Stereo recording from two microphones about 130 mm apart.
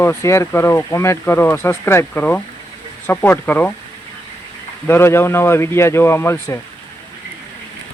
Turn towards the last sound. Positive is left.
turn(degrees=20)  # may be behind; listen again after turning